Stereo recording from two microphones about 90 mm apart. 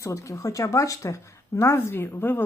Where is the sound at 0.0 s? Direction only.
35° left (ahead or behind).